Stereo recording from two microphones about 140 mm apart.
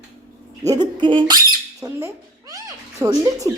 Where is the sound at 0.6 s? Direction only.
30° right (ahead or behind).